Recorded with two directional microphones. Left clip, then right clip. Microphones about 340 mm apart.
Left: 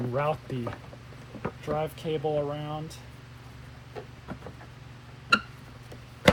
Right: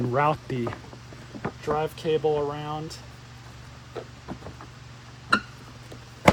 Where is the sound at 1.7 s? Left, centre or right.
Right.